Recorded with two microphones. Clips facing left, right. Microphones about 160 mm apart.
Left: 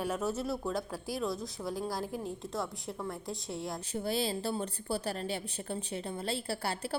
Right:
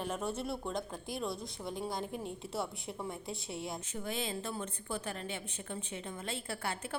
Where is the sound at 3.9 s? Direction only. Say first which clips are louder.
Left 7 dB; 35° left (ahead or behind).